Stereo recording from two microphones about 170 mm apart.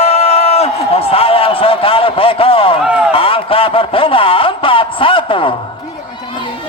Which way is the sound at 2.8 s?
5° right (ahead or behind).